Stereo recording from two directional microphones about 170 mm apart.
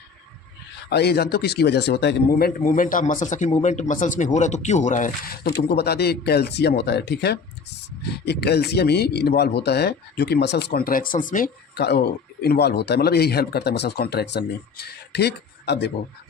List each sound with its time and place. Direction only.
0.9 s speech: 75° left (ahead or behind); by 11.5 s 50° left (ahead or behind)
11.7 s speech: 75° left (ahead or behind)